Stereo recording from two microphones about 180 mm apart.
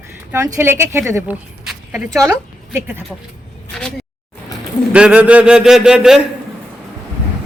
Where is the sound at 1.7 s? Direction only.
Centre (ahead or behind).